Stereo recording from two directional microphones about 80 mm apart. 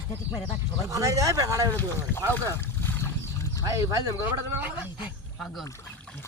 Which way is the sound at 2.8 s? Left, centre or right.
Left.